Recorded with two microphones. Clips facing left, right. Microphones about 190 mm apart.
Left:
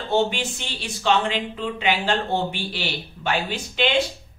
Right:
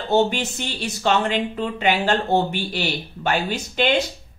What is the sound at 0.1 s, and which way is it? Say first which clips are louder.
Speech: right 3 dB; 40° right (ahead or behind).